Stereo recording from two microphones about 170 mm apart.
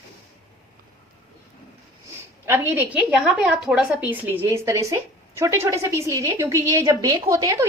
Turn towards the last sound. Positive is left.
turn(degrees=-20)  # may be behind; listen again after turning